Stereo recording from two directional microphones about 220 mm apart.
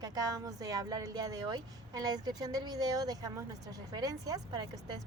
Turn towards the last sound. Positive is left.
turn(degrees=-20)  # may be behind; listen again after turning